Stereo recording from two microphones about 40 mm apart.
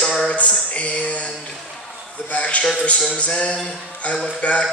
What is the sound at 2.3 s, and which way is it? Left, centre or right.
A man's voice, left.